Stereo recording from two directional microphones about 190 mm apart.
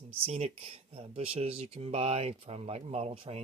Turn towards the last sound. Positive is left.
turn(degrees=-30)  # may be behind; listen again after turning